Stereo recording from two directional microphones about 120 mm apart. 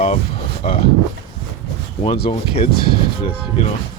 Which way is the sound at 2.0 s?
55° left (ahead or behind).